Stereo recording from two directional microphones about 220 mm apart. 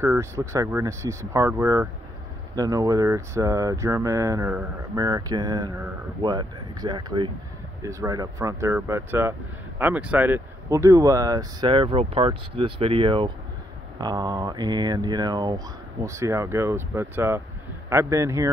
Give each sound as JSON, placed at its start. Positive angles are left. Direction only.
{"t": 0.0, "sound": "speech", "side_deg": -10}